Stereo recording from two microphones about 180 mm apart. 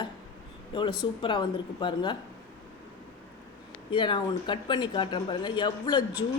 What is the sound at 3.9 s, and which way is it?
Speech, 25° left (ahead or behind).